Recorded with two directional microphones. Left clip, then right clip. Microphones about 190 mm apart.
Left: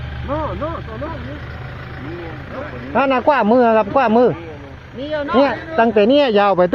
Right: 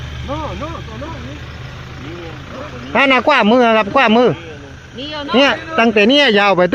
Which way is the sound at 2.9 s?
35° right (ahead or behind).